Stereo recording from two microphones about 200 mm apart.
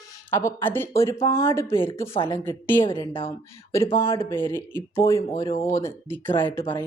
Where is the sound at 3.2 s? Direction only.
15° left (ahead or behind).